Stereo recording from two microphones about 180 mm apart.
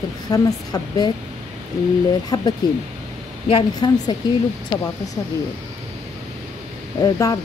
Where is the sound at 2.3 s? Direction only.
20° left (ahead or behind).